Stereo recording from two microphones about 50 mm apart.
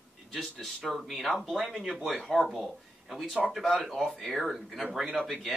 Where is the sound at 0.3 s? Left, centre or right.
Centre.